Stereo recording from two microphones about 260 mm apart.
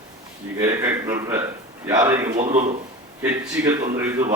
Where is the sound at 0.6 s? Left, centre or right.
Centre.